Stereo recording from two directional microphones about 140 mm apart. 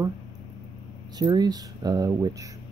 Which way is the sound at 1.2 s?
30° right (ahead or behind).